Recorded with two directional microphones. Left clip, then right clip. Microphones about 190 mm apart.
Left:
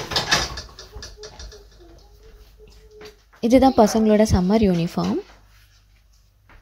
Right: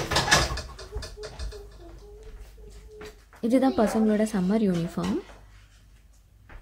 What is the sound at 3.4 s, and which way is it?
A woman's voice, 30° left (ahead or behind).